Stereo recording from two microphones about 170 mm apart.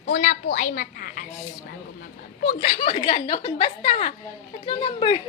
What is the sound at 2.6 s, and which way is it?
A woman's voice, 35° left (ahead or behind).